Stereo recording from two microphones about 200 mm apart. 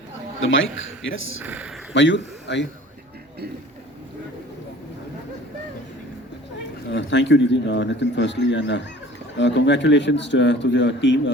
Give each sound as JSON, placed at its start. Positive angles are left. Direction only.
{"t": 0.3, "sound": "speech", "side_deg": 70}
{"t": 1.4, "sound": "speech", "side_deg": -10}
{"t": 1.9, "sound": "a man's voice", "side_deg": 65}
{"t": 6.9, "sound": "speech", "side_deg": 60}